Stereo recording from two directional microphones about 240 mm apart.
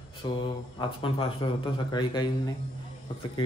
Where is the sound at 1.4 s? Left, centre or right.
Left.